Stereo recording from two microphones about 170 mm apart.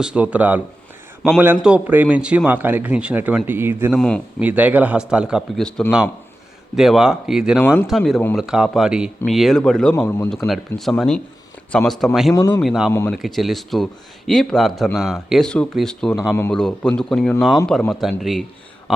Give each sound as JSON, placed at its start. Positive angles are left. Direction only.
{"t": 0.0, "sound": "a man's voice", "side_deg": -5}
{"t": 3.9, "sound": "speech", "side_deg": 5}
{"t": 4.4, "sound": "speech", "side_deg": -10}
{"t": 12.3, "sound": "speech", "side_deg": 20}
{"t": 12.6, "sound": "speech", "side_deg": -5}
{"t": 16.3, "sound": "speech", "side_deg": 15}